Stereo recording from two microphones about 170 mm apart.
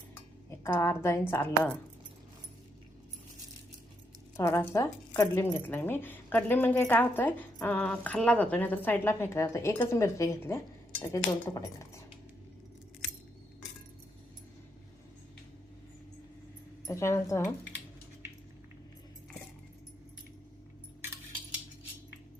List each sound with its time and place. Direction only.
0.6 s a woman's voice: 15° left (ahead or behind)
4.4 s a woman's voice: 15° left (ahead or behind)
16.8 s a woman's voice: 15° left (ahead or behind)